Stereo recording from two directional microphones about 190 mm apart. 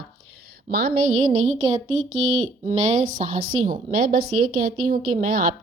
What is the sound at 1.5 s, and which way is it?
Speech, 90° right.